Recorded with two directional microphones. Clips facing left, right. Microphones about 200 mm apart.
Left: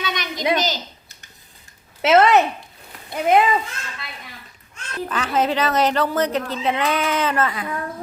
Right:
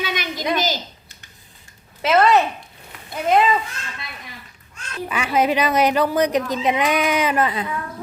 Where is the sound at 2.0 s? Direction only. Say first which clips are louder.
Left 1 dB; 20° left (ahead or behind).